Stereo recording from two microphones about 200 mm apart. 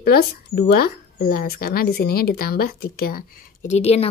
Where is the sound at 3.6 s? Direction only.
35° left (ahead or behind).